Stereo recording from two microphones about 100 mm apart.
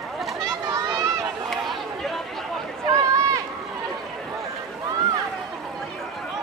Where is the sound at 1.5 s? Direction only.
Centre (ahead or behind).